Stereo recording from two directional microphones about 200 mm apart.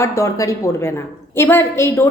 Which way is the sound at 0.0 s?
15° left (ahead or behind).